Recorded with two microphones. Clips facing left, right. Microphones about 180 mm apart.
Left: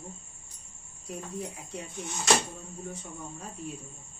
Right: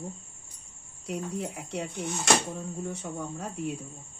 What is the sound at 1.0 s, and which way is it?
Speech, 80° right.